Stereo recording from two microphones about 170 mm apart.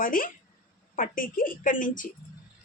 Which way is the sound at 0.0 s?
55° left (ahead or behind).